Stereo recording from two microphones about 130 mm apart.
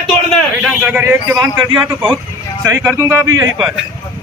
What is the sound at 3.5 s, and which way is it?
Speech, 5° right (ahead or behind).